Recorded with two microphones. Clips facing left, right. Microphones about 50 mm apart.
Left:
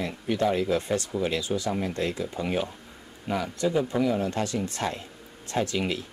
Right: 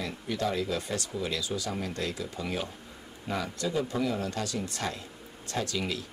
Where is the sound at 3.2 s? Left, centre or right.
Centre.